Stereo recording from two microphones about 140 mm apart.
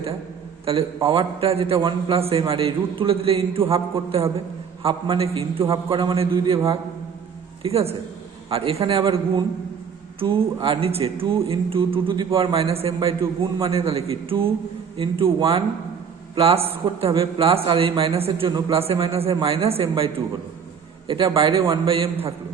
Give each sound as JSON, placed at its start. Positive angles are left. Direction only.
{"t": 0.6, "sound": "a man's voice", "side_deg": -40}
{"t": 7.6, "sound": "a man's voice", "side_deg": -45}
{"t": 21.4, "sound": "speech", "side_deg": -40}